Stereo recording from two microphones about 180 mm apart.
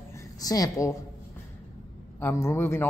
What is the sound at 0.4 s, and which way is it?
Speech, 20° left (ahead or behind).